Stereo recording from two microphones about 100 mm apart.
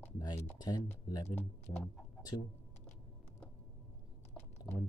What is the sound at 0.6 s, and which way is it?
Speech, 40° left (ahead or behind).